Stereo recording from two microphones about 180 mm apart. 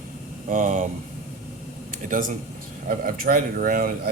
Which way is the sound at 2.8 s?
55° right (ahead or behind).